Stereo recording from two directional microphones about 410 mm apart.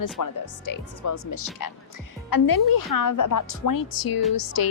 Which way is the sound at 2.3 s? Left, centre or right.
Left.